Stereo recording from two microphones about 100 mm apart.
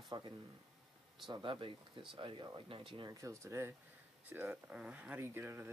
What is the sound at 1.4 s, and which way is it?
Speech, 60° right (ahead or behind).